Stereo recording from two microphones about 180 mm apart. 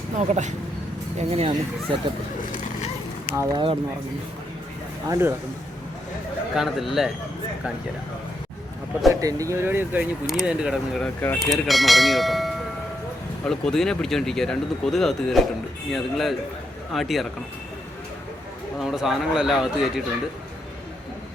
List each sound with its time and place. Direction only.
0.2 s speech: 40° right (ahead or behind)
2.4 s a sound: 45° left (ahead or behind)
3.3 s speech: 15° right (ahead or behind)
5.0 s speech: 15° right (ahead or behind)
6.6 s speech: centre (ahead or behind)
9.2 s speech: 20° right (ahead or behind); by 17.2 s centre (ahead or behind)
18.8 s speech: centre (ahead or behind)